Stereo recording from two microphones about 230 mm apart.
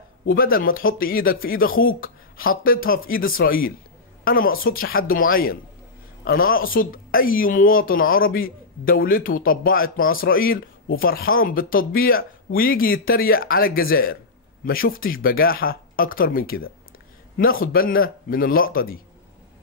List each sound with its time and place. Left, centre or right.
0.3 s speech: left